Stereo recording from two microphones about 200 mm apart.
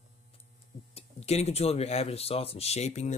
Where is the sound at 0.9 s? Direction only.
30° left (ahead or behind).